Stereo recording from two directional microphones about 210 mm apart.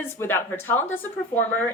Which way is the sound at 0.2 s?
10° left (ahead or behind).